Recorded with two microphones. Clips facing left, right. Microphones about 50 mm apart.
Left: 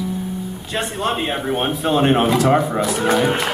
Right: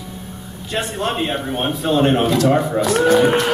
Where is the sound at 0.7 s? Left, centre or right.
Centre.